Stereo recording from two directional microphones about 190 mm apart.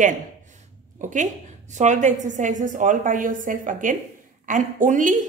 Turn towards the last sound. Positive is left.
turn(degrees=-40)  # may be behind; listen again after turning